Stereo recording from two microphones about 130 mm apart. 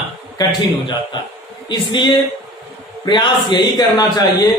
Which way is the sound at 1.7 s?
35° left (ahead or behind).